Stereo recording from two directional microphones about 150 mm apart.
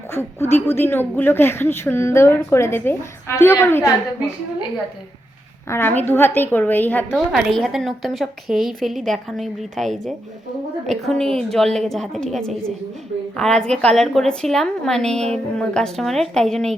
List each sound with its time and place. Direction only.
0.1 s speech: 15° left (ahead or behind)
5.6 s speech: 15° left (ahead or behind)
7.1 s a woman's voice: 5° right (ahead or behind)